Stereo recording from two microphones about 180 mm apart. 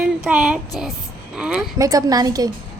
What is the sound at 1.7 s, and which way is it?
Speech, 20° right (ahead or behind).